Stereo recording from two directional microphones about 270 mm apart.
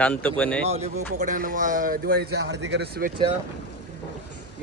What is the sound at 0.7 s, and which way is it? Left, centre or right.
Speech, right.